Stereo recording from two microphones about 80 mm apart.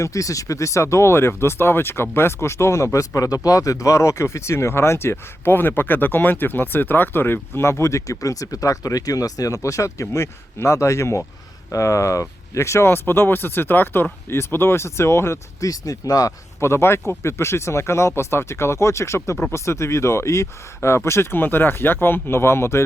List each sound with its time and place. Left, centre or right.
0.0 s speech: left
15.6 s speech: left
16.6 s speech: left